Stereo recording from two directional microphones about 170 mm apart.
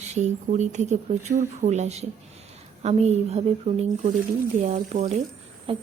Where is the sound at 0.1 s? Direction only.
45° right (ahead or behind).